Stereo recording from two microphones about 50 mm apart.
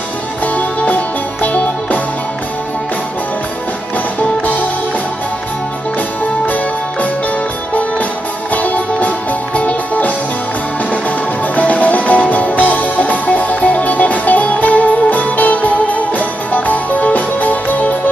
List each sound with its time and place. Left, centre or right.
0.6 s music: left
6.4 s music: left
8.5 s music: left